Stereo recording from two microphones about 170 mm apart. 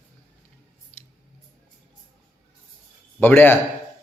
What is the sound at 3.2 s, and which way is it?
Speech, 10° left (ahead or behind).